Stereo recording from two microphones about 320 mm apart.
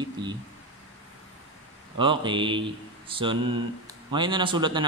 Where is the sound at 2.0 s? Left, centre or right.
Centre.